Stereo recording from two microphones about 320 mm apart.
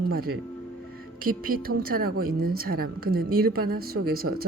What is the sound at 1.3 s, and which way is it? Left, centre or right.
Speech, right.